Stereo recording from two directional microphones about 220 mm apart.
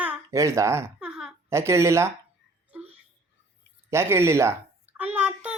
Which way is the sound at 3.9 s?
10° right (ahead or behind).